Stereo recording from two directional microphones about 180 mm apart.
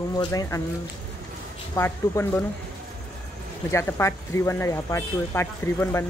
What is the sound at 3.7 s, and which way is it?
Speech, 15° left (ahead or behind).